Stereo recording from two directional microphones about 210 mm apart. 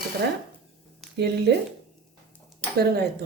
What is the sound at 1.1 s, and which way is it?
Speech, 50° right (ahead or behind).